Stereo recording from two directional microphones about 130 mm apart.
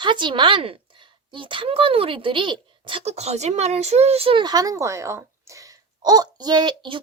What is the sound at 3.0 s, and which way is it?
Speech, 55° right (ahead or behind).